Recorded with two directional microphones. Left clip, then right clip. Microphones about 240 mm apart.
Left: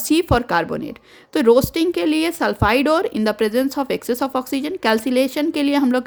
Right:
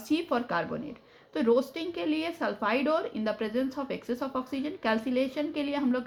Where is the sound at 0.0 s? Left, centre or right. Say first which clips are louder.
Left 12 dB; left.